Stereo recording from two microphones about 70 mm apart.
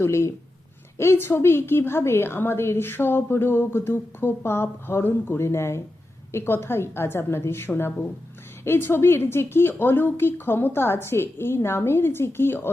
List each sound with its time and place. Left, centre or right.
0.0 s a woman's voice: left